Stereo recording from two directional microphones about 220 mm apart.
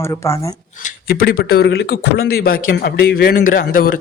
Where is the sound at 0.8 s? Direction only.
45° left (ahead or behind).